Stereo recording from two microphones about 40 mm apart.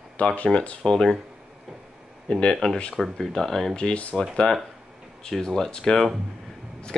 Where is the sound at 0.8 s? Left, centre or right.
Centre.